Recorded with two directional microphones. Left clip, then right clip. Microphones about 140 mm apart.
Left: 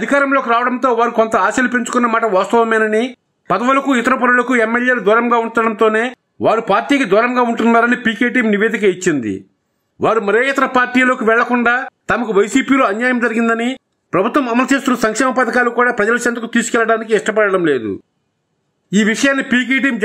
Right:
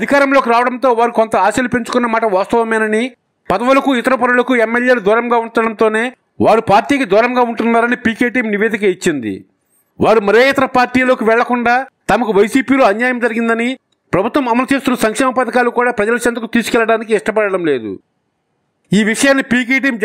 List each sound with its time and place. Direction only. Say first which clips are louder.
0.0 s speech: right 3 dB; 45° right (ahead or behind)
18.9 s speech: right 2 dB; 45° right (ahead or behind)